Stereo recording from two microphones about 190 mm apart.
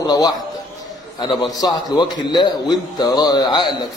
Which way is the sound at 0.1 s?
20° left (ahead or behind).